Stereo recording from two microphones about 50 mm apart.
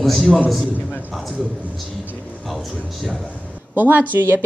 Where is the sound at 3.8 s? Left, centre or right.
Right.